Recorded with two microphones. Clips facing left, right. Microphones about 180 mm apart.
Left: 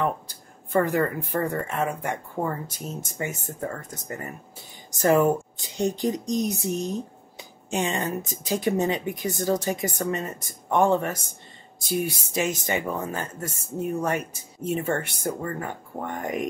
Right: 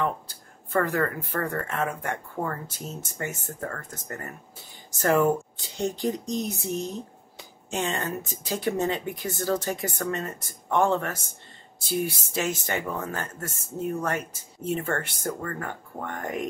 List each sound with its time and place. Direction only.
0.7 s speech: 15° left (ahead or behind)